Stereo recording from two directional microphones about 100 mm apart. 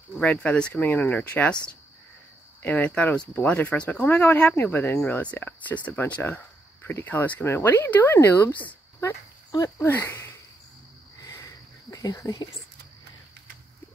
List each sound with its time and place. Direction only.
0.2 s speech: 10° left (ahead or behind)
2.6 s speech: 15° left (ahead or behind)
6.2 s cricket: 25° left (ahead or behind)
7.1 s speech: 15° left (ahead or behind)
11.2 s cricket: 35° left (ahead or behind)